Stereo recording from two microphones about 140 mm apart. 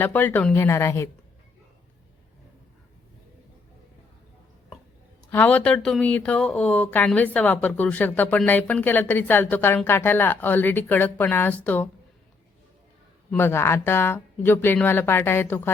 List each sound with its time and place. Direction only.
0.0 s speech: 15° left (ahead or behind)
5.3 s speech: 10° left (ahead or behind)
13.3 s speech: 15° left (ahead or behind)